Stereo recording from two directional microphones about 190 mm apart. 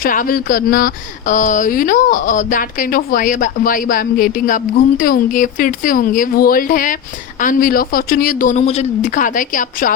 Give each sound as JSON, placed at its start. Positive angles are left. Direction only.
{"t": 0.0, "sound": "speech", "side_deg": 45}